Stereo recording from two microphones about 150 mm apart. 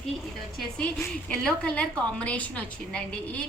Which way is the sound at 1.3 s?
10° left (ahead or behind).